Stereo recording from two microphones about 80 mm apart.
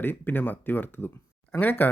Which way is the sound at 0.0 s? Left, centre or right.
Left.